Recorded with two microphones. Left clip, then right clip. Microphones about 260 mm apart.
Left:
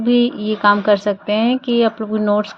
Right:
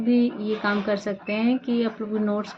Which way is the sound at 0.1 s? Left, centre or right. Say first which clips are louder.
Left 7 dB; left.